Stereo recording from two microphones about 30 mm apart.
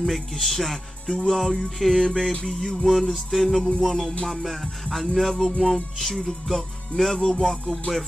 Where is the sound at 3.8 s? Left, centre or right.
Centre.